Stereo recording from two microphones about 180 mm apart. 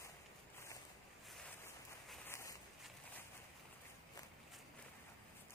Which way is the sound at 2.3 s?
15° left (ahead or behind).